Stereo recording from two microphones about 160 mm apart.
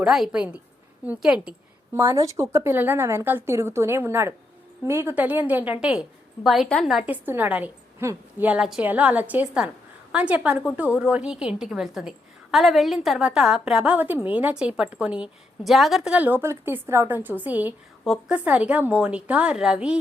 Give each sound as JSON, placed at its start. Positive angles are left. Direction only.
{"t": 0.0, "sound": "a woman's voice", "side_deg": -5}
{"t": 1.9, "sound": "a woman's voice", "side_deg": -15}